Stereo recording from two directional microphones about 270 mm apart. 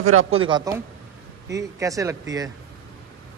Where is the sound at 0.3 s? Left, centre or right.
Centre.